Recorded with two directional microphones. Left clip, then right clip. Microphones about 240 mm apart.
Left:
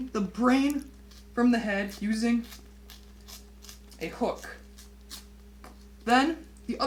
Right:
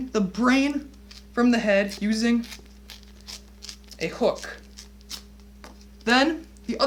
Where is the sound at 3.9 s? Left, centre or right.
Right.